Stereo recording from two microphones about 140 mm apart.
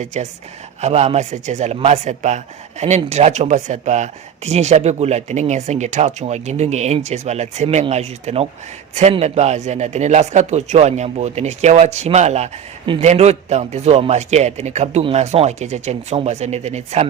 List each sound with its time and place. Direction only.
0.0 s speech: 55° right (ahead or behind)